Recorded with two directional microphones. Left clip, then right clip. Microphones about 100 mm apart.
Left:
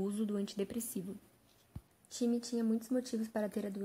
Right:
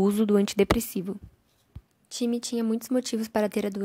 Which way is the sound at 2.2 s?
60° right (ahead or behind).